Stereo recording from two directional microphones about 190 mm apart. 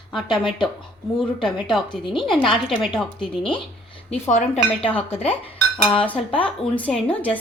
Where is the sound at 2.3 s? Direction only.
25° left (ahead or behind).